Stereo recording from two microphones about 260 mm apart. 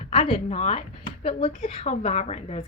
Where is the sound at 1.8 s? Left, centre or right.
Left.